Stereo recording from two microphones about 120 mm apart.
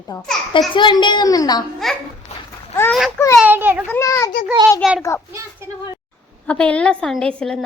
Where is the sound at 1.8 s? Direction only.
Centre (ahead or behind).